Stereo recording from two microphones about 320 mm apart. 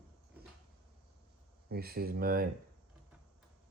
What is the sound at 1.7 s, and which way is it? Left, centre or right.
Speech, right.